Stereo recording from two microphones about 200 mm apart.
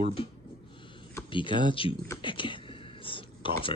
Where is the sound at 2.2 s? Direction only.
25° left (ahead or behind).